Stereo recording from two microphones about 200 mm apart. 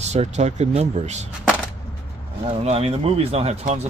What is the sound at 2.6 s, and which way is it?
Speech, 30° right (ahead or behind).